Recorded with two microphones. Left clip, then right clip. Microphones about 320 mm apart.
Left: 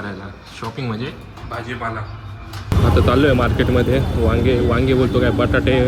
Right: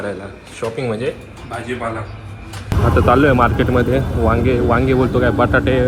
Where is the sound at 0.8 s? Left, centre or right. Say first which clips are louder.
Right 7 dB; centre.